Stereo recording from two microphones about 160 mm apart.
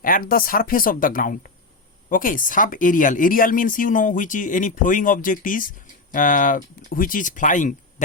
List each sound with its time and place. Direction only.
0.0 s speech: 65° left (ahead or behind)